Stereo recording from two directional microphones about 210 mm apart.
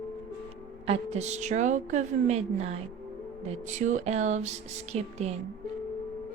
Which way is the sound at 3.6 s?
35° right (ahead or behind).